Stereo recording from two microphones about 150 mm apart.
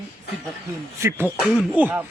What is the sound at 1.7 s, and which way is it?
Speech, 10° right (ahead or behind).